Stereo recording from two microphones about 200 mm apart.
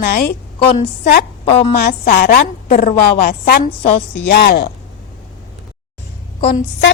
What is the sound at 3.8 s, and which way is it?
Speech, 35° left (ahead or behind).